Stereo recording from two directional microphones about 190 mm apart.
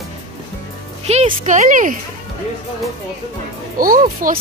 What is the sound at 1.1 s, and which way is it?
Speech, 35° right (ahead or behind).